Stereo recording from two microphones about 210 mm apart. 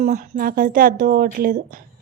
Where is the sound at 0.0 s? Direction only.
35° right (ahead or behind).